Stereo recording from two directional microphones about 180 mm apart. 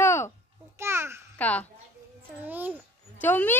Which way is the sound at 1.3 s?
10° left (ahead or behind).